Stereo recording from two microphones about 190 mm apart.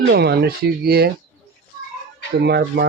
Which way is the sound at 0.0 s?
60° right (ahead or behind).